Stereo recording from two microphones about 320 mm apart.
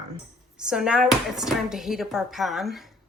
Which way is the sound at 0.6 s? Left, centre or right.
Centre.